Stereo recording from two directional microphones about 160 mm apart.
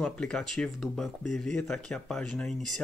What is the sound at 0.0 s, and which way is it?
Speech, 5° left (ahead or behind).